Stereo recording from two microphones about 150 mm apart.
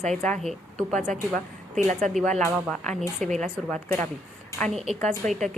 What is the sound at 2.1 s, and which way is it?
A woman's voice, centre (ahead or behind).